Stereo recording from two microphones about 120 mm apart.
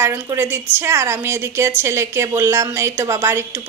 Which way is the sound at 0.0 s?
20° right (ahead or behind).